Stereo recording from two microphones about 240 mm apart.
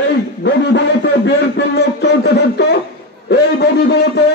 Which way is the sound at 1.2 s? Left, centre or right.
Left.